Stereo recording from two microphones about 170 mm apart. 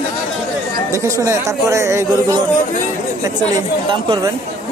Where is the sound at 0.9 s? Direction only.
20° right (ahead or behind).